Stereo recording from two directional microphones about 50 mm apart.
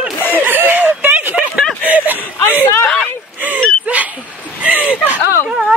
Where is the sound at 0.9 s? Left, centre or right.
Right.